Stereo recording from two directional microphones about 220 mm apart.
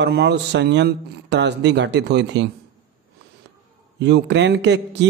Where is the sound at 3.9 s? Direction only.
50° right (ahead or behind).